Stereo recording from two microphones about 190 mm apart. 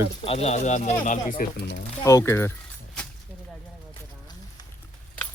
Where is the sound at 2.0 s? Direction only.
15° left (ahead or behind).